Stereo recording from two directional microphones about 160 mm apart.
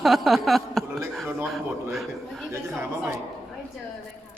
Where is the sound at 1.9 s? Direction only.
Centre (ahead or behind).